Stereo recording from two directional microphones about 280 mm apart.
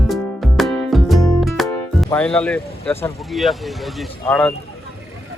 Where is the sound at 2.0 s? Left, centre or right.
Centre.